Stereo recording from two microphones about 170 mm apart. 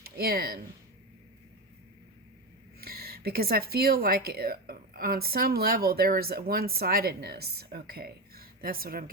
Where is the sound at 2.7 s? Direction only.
65° right (ahead or behind).